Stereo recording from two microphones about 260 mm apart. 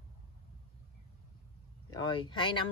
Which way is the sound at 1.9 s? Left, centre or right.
Centre.